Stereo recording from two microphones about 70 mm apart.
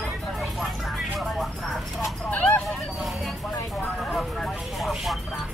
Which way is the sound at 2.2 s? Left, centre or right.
Left.